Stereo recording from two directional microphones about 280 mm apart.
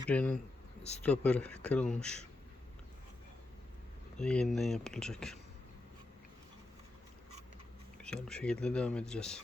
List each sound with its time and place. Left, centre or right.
0.1 s speech: centre
0.8 s speech: left
1.0 s speech: centre
4.2 s speech: centre
8.0 s speech: centre